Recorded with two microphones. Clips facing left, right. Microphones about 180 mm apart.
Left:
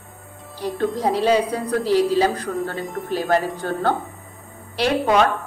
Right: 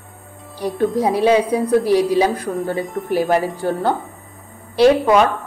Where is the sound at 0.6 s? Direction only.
10° right (ahead or behind).